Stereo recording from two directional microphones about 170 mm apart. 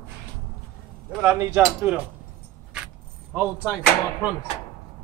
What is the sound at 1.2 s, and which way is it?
Speech, 10° right (ahead or behind).